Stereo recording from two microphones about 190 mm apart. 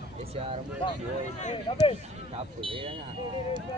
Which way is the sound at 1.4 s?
35° left (ahead or behind).